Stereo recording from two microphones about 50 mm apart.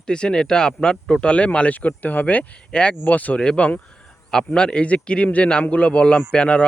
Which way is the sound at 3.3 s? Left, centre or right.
Left.